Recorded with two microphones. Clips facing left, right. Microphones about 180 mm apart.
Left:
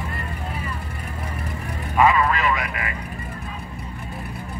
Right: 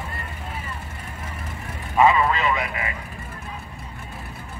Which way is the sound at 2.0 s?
20° right (ahead or behind).